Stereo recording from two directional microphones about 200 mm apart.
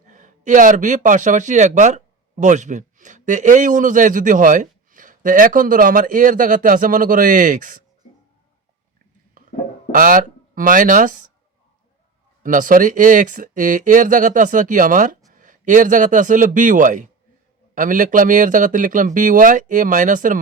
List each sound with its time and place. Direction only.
0.1 s speech: 40° right (ahead or behind)
9.9 s speech: 45° right (ahead or behind)
12.4 s a man's voice: 40° right (ahead or behind)